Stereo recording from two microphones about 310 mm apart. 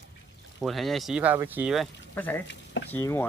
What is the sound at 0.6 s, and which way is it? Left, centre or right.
Speech, centre.